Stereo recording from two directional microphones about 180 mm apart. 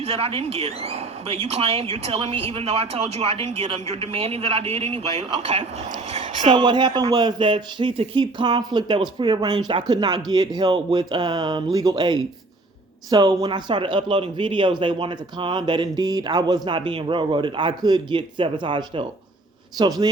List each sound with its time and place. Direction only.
0.0 s speech: 35° right (ahead or behind)
6.4 s speech: 25° right (ahead or behind)